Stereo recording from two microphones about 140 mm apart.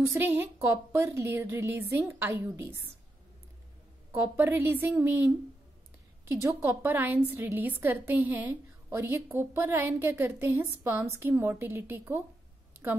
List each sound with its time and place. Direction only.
0.0 s a woman's voice: 15° right (ahead or behind)
4.1 s a woman's voice: 15° right (ahead or behind)